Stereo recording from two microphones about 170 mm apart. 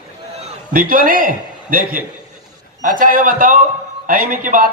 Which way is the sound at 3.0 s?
50° right (ahead or behind).